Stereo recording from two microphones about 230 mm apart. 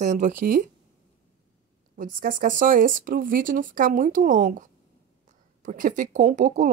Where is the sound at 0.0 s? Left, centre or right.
Right.